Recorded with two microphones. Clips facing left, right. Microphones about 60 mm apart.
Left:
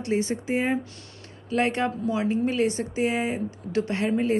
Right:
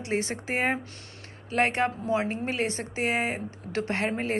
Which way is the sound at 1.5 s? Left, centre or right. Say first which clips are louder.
Left 1 dB; right.